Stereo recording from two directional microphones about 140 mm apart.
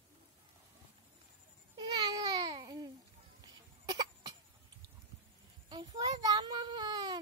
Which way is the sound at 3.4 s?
30° right (ahead or behind).